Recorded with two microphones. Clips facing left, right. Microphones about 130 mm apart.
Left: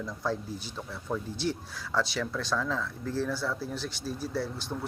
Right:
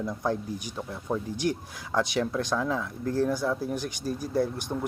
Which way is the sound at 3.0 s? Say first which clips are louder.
Right 7 dB; 50° right (ahead or behind).